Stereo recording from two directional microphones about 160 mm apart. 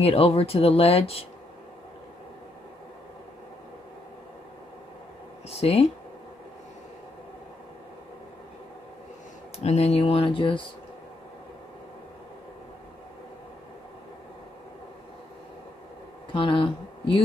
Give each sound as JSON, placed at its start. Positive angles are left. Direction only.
{"t": 0.0, "sound": "speech", "side_deg": 35}
{"t": 5.5, "sound": "speech", "side_deg": 40}
{"t": 9.6, "sound": "speech", "side_deg": 40}
{"t": 16.3, "sound": "speech", "side_deg": 30}